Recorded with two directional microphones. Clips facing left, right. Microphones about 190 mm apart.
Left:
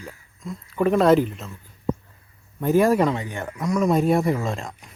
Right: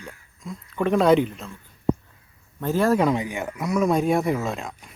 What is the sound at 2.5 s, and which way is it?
Speech, 15° left (ahead or behind).